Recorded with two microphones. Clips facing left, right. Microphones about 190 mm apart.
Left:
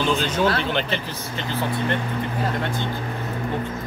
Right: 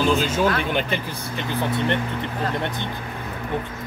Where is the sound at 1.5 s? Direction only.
20° right (ahead or behind).